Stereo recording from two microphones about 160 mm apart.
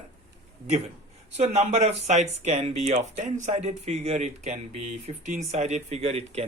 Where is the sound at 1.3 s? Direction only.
45° right (ahead or behind).